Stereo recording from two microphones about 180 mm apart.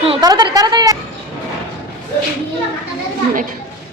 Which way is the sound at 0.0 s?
30° right (ahead or behind).